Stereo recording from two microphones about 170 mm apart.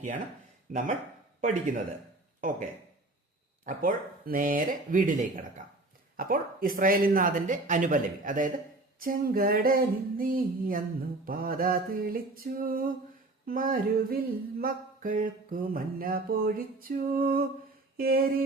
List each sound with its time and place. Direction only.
0.7 s speech: 50° right (ahead or behind)
3.7 s speech: 50° right (ahead or behind)
9.0 s a sound: 60° right (ahead or behind)